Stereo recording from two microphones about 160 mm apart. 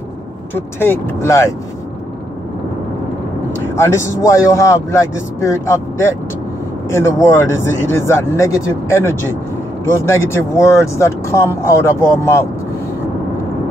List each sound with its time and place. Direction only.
0.6 s speech: 15° left (ahead or behind)
3.6 s speech: 15° left (ahead or behind)